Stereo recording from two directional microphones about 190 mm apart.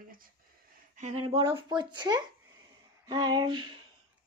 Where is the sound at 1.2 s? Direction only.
25° right (ahead or behind).